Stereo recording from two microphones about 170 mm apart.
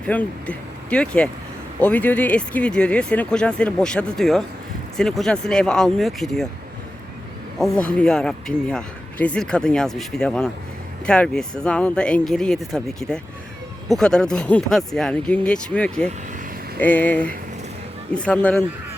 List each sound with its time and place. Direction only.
0.0 s speech: 10° left (ahead or behind)
7.6 s speech: 5° left (ahead or behind)